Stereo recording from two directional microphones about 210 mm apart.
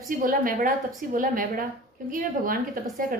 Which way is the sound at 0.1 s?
40° right (ahead or behind).